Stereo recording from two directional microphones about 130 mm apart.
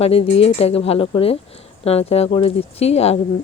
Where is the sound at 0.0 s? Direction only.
50° left (ahead or behind).